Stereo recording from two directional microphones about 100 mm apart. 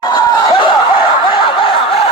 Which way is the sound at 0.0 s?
45° left (ahead or behind).